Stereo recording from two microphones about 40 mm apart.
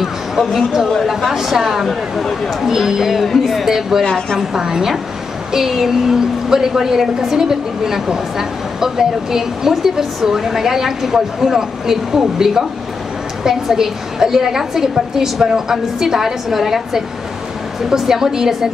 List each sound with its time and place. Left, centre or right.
0.0 s a sound: centre
1.0 s a woman's voice: centre
1.9 s speech: centre
2.6 s a woman's voice: centre
4.0 s a woman's voice: centre
4.6 s a woman's voice: centre